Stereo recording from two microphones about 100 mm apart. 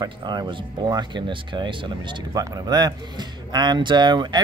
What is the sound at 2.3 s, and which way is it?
Speech, 40° right (ahead or behind).